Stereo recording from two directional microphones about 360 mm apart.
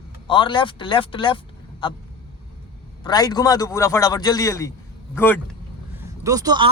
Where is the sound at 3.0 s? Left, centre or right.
Centre.